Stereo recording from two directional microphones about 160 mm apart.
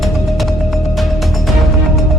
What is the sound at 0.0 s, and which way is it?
Music, centre (ahead or behind).